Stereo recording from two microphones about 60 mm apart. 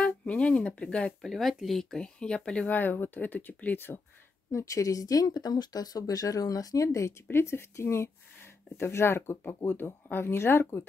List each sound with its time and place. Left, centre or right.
0.0 s speech: centre
1.2 s speech: centre
2.7 s speech: left
4.5 s speech: left
7.2 s speech: left